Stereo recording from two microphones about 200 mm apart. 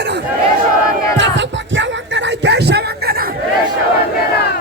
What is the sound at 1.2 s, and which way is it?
Music, 65° right (ahead or behind).